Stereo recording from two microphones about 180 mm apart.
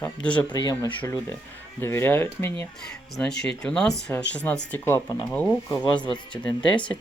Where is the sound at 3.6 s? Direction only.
5° left (ahead or behind).